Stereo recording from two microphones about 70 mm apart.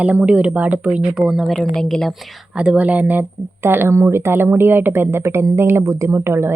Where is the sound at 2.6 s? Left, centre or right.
Centre.